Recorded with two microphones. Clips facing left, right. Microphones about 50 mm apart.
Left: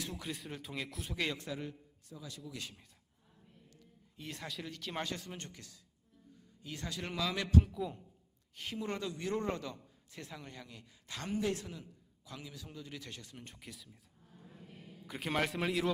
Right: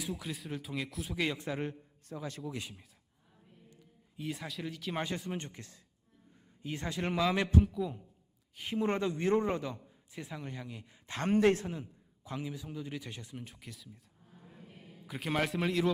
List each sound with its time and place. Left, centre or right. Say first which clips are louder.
0.0 s a man's voice: right 3 dB; centre
1.5 s a man's voice: right 6 dB; right
2.6 s a man's voice: right 4 dB; centre
4.2 s a man's voice: right 5 dB; centre
5.0 s a man's voice: right 5 dB; centre
7.6 s a man's voice: right 5 dB; centre
8.5 s speech: right 6 dB; centre
8.8 s speech: right 8 dB; right
9.4 s a man's voice: right 4 dB; centre
11.1 s a man's voice: right 9 dB; right; by 13.3 s centre
13.3 s a man's voice: right 4 dB; centre
14.4 s a sound: even; centre